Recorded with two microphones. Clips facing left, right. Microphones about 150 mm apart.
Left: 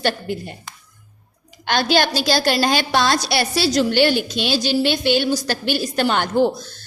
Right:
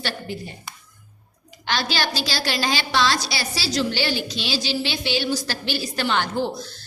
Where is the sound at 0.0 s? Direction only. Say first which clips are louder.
Left 7 dB; 60° left (ahead or behind).